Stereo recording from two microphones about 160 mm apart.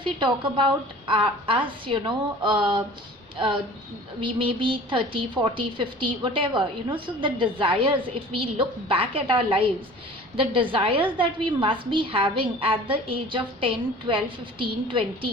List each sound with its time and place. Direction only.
0.0 s a woman's voice: 30° right (ahead or behind)
4.2 s a woman's voice: 30° right (ahead or behind)